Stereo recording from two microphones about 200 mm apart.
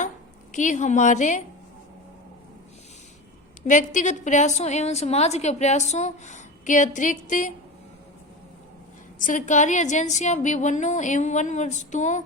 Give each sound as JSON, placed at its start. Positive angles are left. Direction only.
{"t": 0.5, "sound": "a woman's voice", "side_deg": 40}
{"t": 3.7, "sound": "a woman's voice", "side_deg": 40}
{"t": 9.1, "sound": "a woman's voice", "side_deg": 40}